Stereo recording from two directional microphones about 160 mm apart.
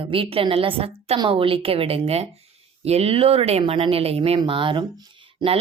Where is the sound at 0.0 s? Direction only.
35° right (ahead or behind).